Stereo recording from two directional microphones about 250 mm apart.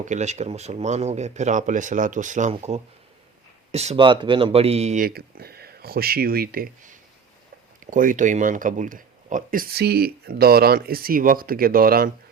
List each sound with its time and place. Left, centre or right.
0.0 s a man's voice: right